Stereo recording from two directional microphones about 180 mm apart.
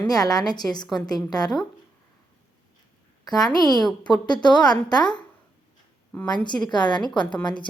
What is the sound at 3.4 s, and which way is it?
A woman's voice, 20° left (ahead or behind).